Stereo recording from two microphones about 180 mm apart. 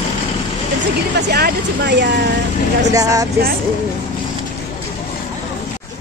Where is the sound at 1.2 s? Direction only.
65° right (ahead or behind).